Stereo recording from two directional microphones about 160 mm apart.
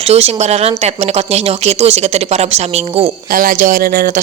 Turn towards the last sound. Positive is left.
turn(degrees=-65)  # may be behind; listen again after turning